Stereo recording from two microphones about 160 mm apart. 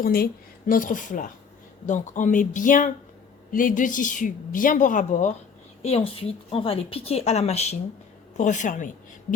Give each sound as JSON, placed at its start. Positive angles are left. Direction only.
{"t": 0.0, "sound": "a woman's voice", "side_deg": 70}
{"t": 0.7, "sound": "a woman's voice", "side_deg": 55}
{"t": 5.8, "sound": "a woman's voice", "side_deg": 40}